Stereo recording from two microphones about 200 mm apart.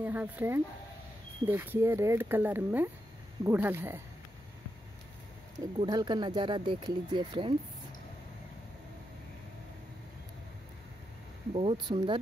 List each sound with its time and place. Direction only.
0.0 s speech: 10° right (ahead or behind)
5.8 s speech: 20° right (ahead or behind)
11.5 s speech: 25° right (ahead or behind)